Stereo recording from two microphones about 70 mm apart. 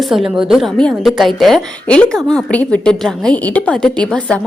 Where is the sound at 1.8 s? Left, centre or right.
Centre.